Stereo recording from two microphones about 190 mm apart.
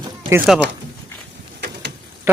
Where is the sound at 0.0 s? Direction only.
15° right (ahead or behind).